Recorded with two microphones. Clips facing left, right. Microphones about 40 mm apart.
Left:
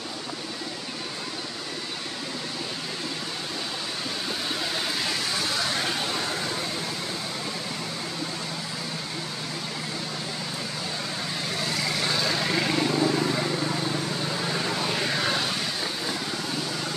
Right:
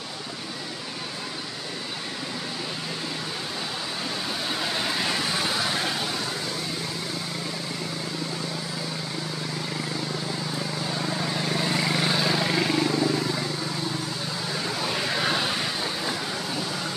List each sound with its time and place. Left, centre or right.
4.9 s vehicle: centre
5.8 s vehicle: centre
6.1 s vehicle: centre
11.0 s vehicle: centre